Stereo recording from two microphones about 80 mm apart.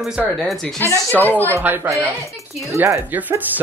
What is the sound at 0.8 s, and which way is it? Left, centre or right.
Speech, right.